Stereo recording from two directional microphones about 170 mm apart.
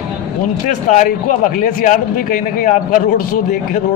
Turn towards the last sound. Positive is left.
turn(degrees=50)  # may be behind; listen again after turning